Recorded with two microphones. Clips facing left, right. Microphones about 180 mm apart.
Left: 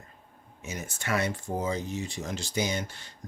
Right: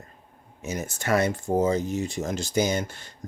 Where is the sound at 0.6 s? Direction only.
40° right (ahead or behind).